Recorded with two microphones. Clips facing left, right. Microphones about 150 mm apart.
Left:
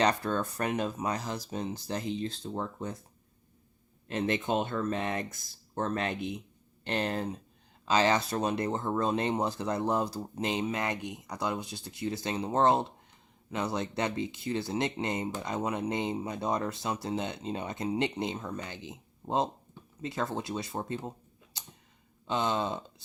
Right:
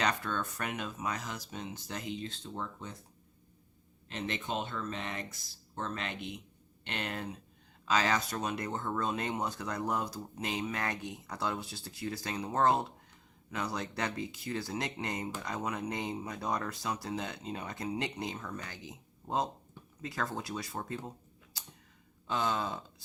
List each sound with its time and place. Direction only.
0.0 s speech: 35° left (ahead or behind)
4.1 s speech: 50° left (ahead or behind)
6.8 s speech: 35° left (ahead or behind)
21.5 s tick-tock: 20° left (ahead or behind)
22.3 s speech: 20° left (ahead or behind)